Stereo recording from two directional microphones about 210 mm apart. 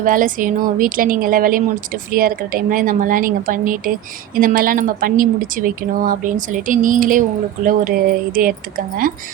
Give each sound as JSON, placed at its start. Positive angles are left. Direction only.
{"t": 0.0, "sound": "speech", "side_deg": -40}